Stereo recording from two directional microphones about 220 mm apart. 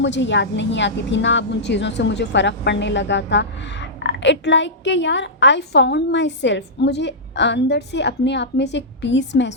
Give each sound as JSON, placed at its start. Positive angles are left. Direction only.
{"t": 0.0, "sound": "a woman's voice", "side_deg": 55}